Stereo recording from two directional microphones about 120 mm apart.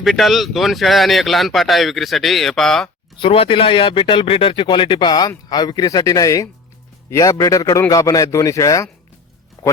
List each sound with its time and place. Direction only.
0.0 s speech: centre (ahead or behind)
3.2 s a man's voice: 50° left (ahead or behind); by 8.9 s 25° left (ahead or behind)